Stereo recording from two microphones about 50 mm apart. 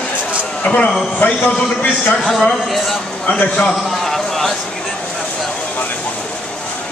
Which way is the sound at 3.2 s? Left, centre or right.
Left.